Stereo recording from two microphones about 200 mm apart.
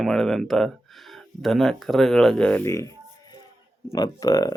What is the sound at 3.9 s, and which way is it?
Speech, 20° left (ahead or behind).